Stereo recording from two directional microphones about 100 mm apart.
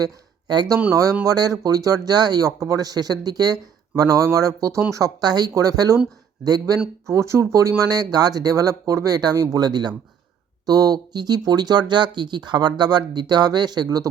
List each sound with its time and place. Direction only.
0.0 s speech: 45° right (ahead or behind)